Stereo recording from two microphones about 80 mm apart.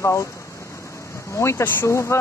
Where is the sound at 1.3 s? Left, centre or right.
Left.